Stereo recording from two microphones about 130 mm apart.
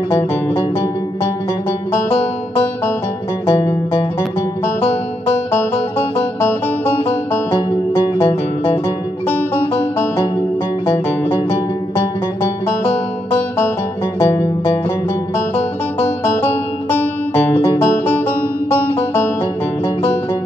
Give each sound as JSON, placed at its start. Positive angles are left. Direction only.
{"t": 3.4, "sound": "music", "side_deg": 25}
{"t": 5.5, "sound": "music", "side_deg": 15}
{"t": 14.2, "sound": "music", "side_deg": 20}
{"t": 15.5, "sound": "music", "side_deg": 15}